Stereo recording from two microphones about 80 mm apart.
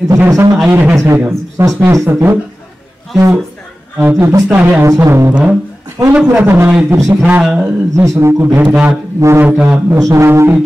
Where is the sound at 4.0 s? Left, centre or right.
Right.